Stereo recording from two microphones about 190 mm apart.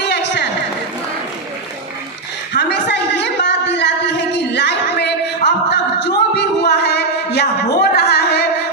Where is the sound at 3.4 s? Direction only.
65° left (ahead or behind).